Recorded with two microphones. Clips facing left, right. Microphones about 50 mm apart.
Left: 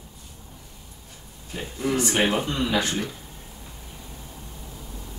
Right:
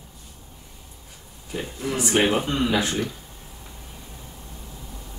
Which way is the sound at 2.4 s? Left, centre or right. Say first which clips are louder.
Right 2 dB; centre.